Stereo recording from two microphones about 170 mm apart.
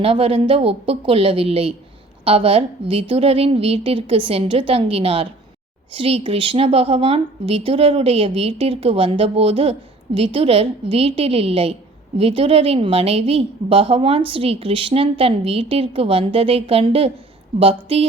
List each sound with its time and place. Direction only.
0.0 s a woman's voice: 35° right (ahead or behind)